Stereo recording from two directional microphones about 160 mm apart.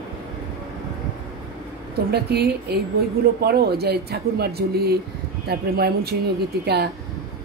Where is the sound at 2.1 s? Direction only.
90° right.